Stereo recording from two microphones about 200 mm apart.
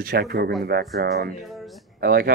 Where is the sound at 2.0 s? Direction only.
50° right (ahead or behind).